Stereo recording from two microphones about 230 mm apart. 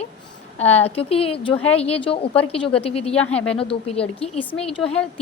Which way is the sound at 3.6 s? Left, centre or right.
Left.